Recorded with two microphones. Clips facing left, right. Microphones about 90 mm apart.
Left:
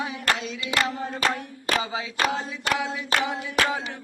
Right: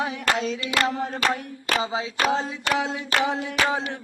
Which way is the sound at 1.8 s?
25° right (ahead or behind).